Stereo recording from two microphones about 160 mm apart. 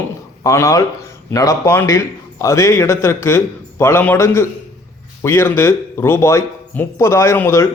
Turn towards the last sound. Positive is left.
turn(degrees=15)  # may be behind; listen again after turning